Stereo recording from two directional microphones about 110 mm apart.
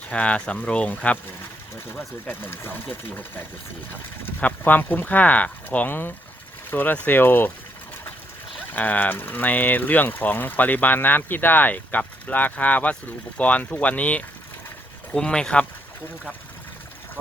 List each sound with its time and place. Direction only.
0.1 s speech: 10° left (ahead or behind)
4.4 s speech: 15° left (ahead or behind)
8.7 s speech: 15° left (ahead or behind)